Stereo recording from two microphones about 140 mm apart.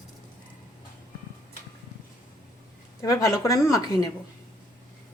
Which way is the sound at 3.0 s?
25° left (ahead or behind).